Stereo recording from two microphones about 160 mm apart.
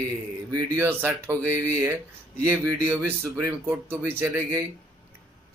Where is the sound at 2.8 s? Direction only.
15° right (ahead or behind).